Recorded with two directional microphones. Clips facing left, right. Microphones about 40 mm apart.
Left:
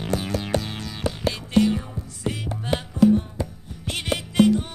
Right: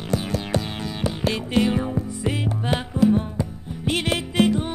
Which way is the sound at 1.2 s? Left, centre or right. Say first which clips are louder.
Left 1 dB; right.